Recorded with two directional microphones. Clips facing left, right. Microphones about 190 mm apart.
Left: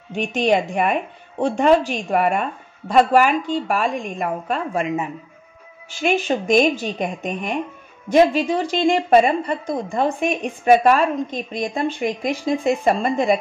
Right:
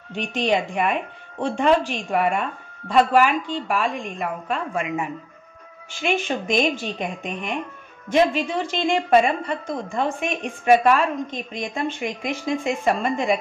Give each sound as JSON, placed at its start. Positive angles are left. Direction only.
{"t": 0.1, "sound": "a woman's voice", "side_deg": 45}
{"t": 6.0, "sound": "speech", "side_deg": 45}